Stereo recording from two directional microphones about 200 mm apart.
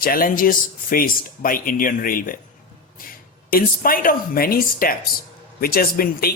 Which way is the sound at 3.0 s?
45° left (ahead or behind).